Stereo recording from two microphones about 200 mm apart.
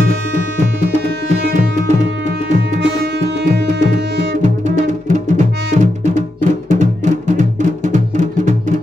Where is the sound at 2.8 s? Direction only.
60° right (ahead or behind).